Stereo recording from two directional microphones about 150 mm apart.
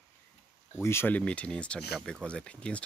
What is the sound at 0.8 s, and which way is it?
Speech, 15° left (ahead or behind).